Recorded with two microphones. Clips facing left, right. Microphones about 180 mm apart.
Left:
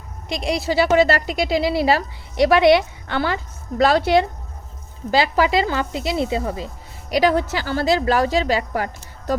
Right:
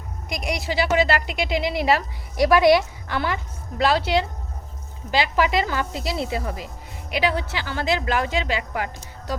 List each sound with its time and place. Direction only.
0.3 s speech: 30° left (ahead or behind)
0.7 s a woman's voice: 45° left (ahead or behind)
3.8 s speech: 50° left (ahead or behind)
5.1 s speech: 35° left (ahead or behind)
7.1 s a woman's voice: 40° left (ahead or behind)